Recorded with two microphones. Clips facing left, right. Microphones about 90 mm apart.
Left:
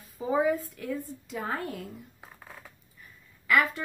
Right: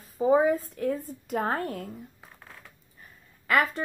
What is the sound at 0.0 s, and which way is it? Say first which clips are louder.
A woman's voice: right 5 dB; 35° right (ahead or behind).